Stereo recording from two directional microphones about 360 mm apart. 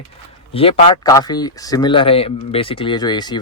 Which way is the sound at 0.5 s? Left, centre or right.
Centre.